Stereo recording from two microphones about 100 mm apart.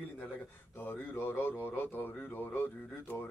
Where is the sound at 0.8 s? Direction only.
20° left (ahead or behind).